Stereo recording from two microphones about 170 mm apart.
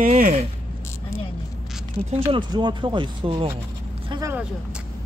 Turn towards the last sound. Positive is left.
turn(degrees=-20)  # may be behind; listen again after turning